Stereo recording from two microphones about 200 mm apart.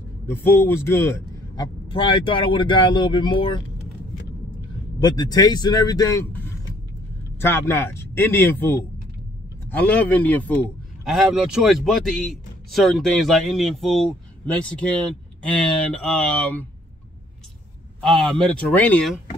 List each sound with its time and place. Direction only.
0.3 s a man's voice: 10° left (ahead or behind)
1.9 s speech: 25° left (ahead or behind)
5.0 s speech: 20° left (ahead or behind)
18.0 s speech: 5° left (ahead or behind)